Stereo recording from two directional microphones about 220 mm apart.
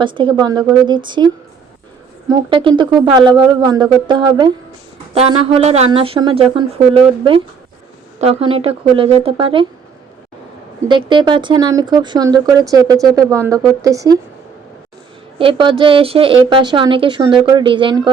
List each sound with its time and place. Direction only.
0.0 s speech: 20° right (ahead or behind)
10.8 s speech: 20° right (ahead or behind)
15.4 s speech: 25° right (ahead or behind)